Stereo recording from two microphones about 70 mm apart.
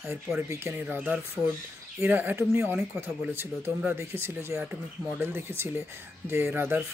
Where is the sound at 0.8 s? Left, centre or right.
Right.